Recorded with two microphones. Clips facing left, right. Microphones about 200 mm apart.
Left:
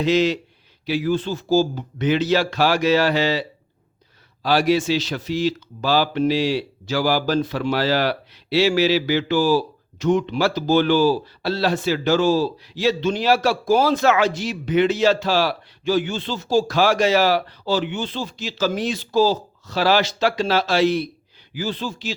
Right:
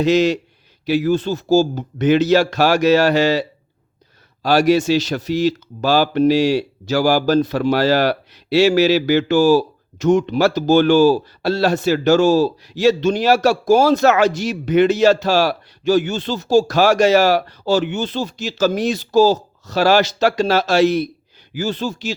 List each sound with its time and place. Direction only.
0.0 s speech: 45° right (ahead or behind)
4.4 s speech: 45° right (ahead or behind)